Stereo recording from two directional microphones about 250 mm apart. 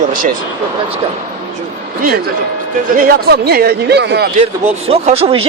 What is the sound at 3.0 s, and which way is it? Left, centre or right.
Speech, right.